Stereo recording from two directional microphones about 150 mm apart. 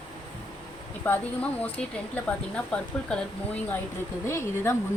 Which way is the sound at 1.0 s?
10° left (ahead or behind).